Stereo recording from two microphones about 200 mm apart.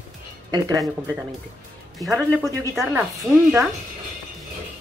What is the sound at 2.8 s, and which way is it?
Speech, 10° right (ahead or behind).